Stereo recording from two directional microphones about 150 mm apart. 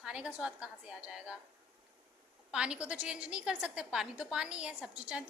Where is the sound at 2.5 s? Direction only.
5° right (ahead or behind).